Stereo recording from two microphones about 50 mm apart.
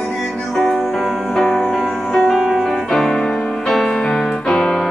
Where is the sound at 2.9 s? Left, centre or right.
Centre.